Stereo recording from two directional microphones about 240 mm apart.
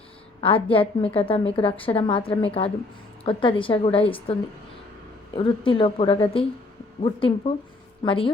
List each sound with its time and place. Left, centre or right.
0.4 s a woman's voice: left